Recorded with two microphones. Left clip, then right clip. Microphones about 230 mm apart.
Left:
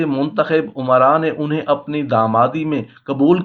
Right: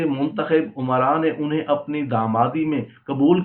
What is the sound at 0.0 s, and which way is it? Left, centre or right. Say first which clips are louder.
Speech: left 5 dB; left.